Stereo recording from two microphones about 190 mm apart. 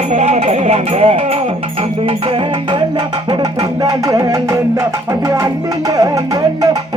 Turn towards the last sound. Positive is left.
turn(degrees=-15)  # may be behind; listen again after turning